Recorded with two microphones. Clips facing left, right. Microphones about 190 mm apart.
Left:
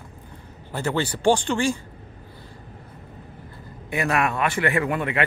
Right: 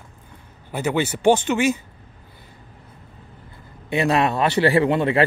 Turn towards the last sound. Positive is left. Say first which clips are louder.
# right 6 dB
turn(degrees=-30)  # may be behind; listen again after turning